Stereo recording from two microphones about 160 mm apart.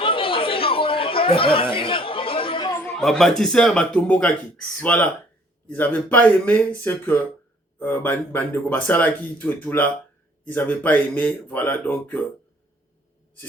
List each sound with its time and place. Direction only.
0.0 s chatter: 35° left (ahead or behind)
2.9 s speech: centre (ahead or behind)